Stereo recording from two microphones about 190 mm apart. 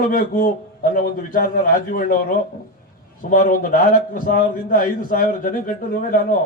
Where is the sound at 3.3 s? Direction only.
45° left (ahead or behind).